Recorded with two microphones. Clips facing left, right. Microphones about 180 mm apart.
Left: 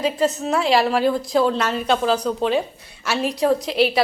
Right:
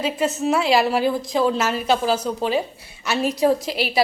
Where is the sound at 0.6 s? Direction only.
5° right (ahead or behind).